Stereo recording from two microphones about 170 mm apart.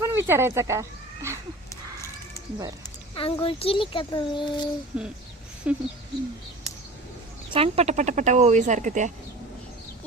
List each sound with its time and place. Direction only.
0.0 s speech: 15° right (ahead or behind)
1.7 s horse: 20° left (ahead or behind)
3.2 s a child's voice: 30° left (ahead or behind)
4.9 s speech: 5° right (ahead or behind)
7.5 s speech: 35° right (ahead or behind)